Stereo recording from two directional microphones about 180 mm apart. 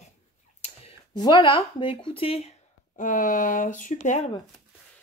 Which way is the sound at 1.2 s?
25° left (ahead or behind).